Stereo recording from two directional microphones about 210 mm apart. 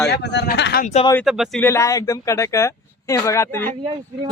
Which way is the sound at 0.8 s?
30° left (ahead or behind).